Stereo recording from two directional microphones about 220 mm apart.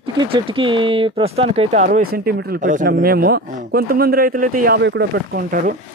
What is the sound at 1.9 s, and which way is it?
A man's voice, 40° right (ahead or behind).